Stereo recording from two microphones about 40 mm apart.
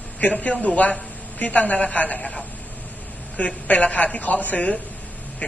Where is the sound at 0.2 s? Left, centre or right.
Left.